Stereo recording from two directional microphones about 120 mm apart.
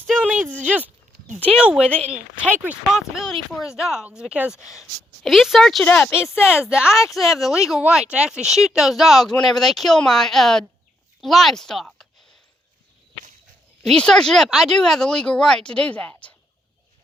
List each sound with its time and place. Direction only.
0.3 s a sound: 15° right (ahead or behind)
0.6 s speech: 15° right (ahead or behind)
5.8 s speech: 15° left (ahead or behind)
6.7 s speech: 5° right (ahead or behind)
13.8 s speech: 5° left (ahead or behind)